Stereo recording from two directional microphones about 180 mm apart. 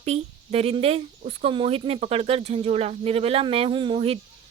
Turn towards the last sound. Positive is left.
turn(degrees=-35)  # may be behind; listen again after turning